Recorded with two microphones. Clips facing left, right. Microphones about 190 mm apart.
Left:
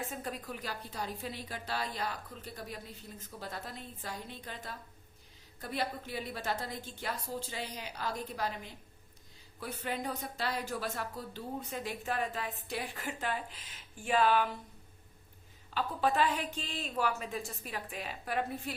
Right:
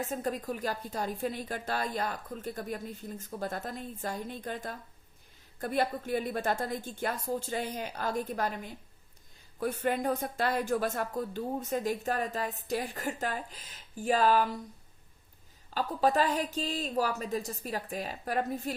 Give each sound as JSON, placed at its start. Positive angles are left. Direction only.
{"t": 0.0, "sound": "speech", "side_deg": -40}
{"t": 15.7, "sound": "a woman's voice", "side_deg": -40}